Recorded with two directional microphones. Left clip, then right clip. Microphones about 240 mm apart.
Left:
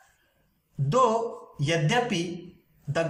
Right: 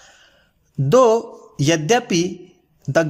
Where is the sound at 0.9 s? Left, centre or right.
Right.